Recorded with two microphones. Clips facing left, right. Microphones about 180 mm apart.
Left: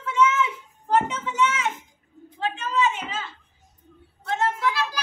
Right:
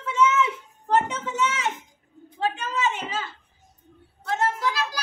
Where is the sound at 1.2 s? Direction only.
35° right (ahead or behind).